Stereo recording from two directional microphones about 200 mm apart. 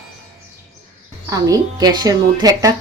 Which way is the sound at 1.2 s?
20° right (ahead or behind).